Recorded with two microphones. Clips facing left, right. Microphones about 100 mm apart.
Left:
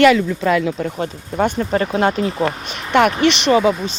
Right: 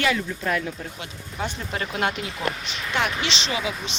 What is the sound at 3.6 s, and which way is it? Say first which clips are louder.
Speech: left 12 dB; 40° left (ahead or behind).